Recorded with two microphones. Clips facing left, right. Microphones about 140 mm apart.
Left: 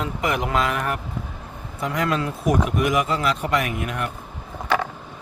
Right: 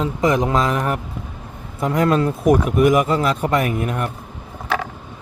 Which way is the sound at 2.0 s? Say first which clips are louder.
Right 7 dB; 40° right (ahead or behind).